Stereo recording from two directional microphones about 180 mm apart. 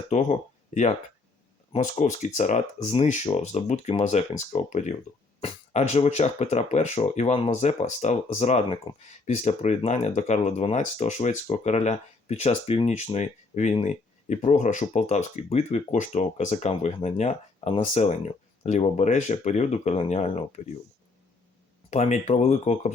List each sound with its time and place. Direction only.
0.1 s speech: 40° left (ahead or behind)
21.8 s speech: 40° left (ahead or behind)